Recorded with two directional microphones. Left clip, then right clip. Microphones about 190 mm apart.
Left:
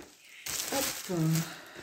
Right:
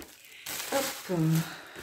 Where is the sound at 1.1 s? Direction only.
10° left (ahead or behind).